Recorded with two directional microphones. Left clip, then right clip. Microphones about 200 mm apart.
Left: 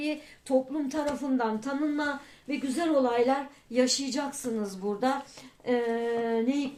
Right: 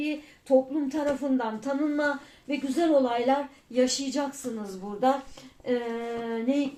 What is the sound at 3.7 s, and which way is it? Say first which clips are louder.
Speech: right 1 dB; 30° left (ahead or behind).